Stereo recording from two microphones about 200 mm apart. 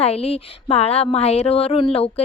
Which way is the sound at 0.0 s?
30° left (ahead or behind).